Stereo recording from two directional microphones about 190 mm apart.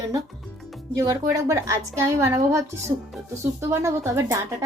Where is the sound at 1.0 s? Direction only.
15° right (ahead or behind).